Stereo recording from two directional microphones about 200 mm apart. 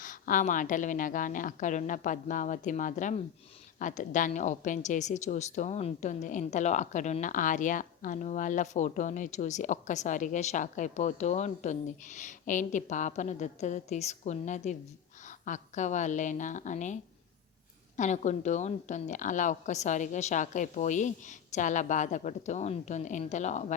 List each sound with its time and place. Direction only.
0.0 s a woman's voice: 40° left (ahead or behind)